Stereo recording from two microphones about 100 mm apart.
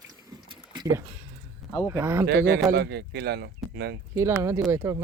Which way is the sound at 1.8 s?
25° right (ahead or behind).